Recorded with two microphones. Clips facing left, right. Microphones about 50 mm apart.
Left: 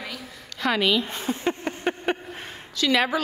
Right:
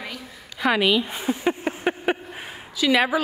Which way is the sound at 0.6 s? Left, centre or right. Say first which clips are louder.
Right 2 dB; centre.